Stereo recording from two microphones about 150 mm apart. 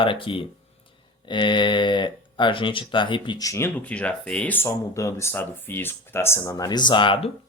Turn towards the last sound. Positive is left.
turn(degrees=35)  # may be behind; listen again after turning